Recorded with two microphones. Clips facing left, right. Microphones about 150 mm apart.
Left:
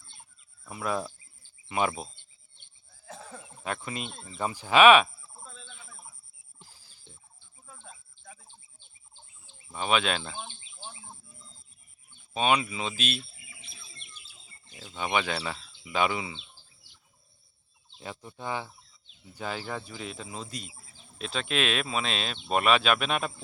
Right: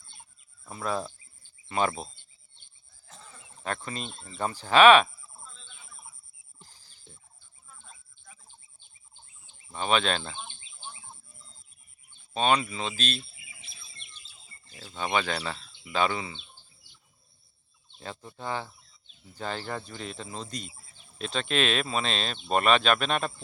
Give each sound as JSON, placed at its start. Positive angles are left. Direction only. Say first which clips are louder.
{"t": 0.7, "sound": "bird", "louder": "even", "side_deg": 10}
{"t": 1.6, "sound": "speech", "louder": "right 1 dB", "side_deg": 10}
{"t": 3.2, "sound": "a sound", "louder": "left 7 dB", "side_deg": 75}
{"t": 3.6, "sound": "speech", "louder": "even", "side_deg": 10}
{"t": 6.6, "sound": "a sound", "louder": "even", "side_deg": 5}
{"t": 9.7, "sound": "speech", "louder": "right 1 dB", "side_deg": 5}
{"t": 10.8, "sound": "bird", "louder": "even", "side_deg": 30}
{"t": 12.3, "sound": "speech", "louder": "right 1 dB", "side_deg": 10}
{"t": 13.3, "sound": "bird", "louder": "left 1 dB", "side_deg": 0}
{"t": 14.7, "sound": "speech", "louder": "even", "side_deg": 20}
{"t": 15.0, "sound": "speech", "louder": "even", "side_deg": 10}
{"t": 18.0, "sound": "speech", "louder": "even", "side_deg": 10}